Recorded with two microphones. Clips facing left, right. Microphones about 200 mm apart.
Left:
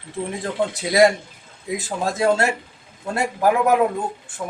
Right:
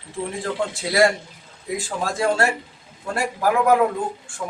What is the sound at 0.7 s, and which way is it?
A man's voice, 20° left (ahead or behind).